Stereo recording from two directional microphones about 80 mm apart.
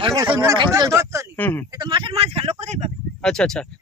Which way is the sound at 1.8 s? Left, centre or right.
Right.